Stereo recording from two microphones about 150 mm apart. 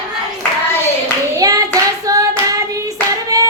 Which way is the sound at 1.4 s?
25° right (ahead or behind).